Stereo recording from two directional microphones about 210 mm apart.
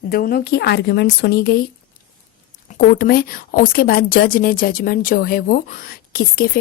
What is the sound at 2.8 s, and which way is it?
A woman's voice, 45° left (ahead or behind).